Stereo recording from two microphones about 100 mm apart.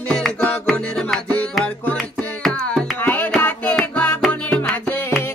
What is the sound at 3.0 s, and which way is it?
Music, 20° left (ahead or behind).